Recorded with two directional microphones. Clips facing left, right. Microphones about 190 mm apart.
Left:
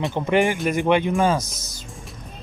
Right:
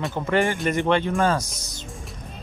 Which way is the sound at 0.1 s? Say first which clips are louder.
Left 2 dB; 15° left (ahead or behind).